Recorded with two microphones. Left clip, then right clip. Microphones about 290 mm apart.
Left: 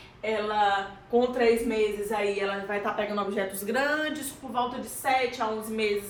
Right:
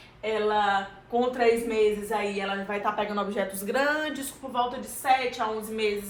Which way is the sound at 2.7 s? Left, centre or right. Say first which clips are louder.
Right 1 dB; centre.